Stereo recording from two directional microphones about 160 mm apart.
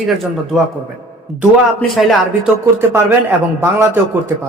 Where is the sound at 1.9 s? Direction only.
Centre (ahead or behind).